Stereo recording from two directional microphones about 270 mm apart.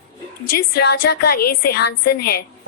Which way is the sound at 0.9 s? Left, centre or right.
Left.